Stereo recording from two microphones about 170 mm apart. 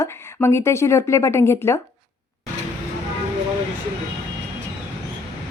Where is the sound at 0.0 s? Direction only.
15° left (ahead or behind).